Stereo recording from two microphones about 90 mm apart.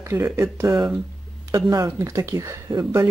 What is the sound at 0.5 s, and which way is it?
Speech, 30° right (ahead or behind).